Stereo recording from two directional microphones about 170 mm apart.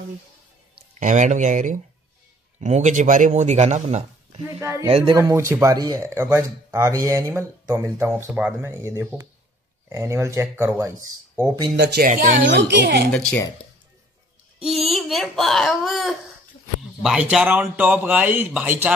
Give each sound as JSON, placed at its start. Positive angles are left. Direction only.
{"t": 0.9, "sound": "speech", "side_deg": -45}
{"t": 4.6, "sound": "speech", "side_deg": -15}
{"t": 4.8, "sound": "speech", "side_deg": -30}
{"t": 11.7, "sound": "speech", "side_deg": -90}
{"t": 12.0, "sound": "speech", "side_deg": -55}
{"t": 12.4, "sound": "a child's voice", "side_deg": -85}
{"t": 13.1, "sound": "speech", "side_deg": 10}
{"t": 14.6, "sound": "speech", "side_deg": 0}